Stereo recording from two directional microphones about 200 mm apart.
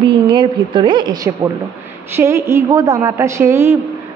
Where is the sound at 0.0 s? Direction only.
25° right (ahead or behind).